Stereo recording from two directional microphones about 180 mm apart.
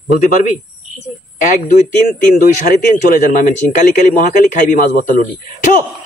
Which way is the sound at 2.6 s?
50° left (ahead or behind).